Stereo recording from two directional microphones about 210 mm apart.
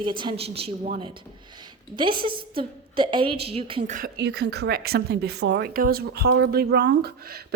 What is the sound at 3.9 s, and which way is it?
Speech, 50° right (ahead or behind).